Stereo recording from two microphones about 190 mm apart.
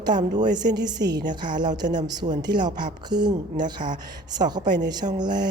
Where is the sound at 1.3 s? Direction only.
25° right (ahead or behind).